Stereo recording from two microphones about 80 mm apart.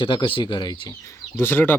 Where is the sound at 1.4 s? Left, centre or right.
Left.